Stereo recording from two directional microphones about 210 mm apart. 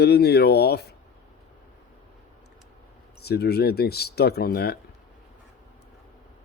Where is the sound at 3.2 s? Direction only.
50° left (ahead or behind).